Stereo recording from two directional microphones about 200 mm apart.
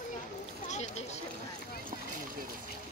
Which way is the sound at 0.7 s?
35° left (ahead or behind).